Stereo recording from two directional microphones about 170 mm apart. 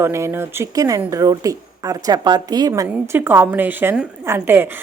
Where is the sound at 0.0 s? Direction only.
15° right (ahead or behind).